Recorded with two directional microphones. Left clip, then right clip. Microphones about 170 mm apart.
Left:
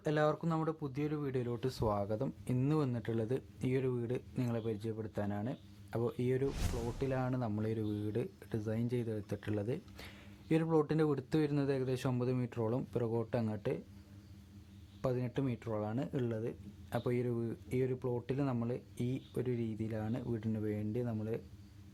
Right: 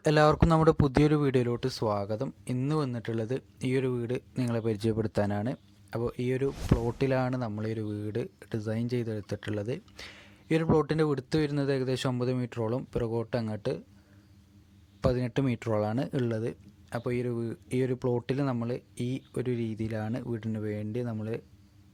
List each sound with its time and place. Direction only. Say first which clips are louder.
0.0 s speech: right 10 dB; 35° right (ahead or behind)
5.9 s speech: right 4 dB; 20° right (ahead or behind)
6.8 s speech: right 8 dB; 35° right (ahead or behind)
15.0 s speech: right 8 dB; 30° right (ahead or behind)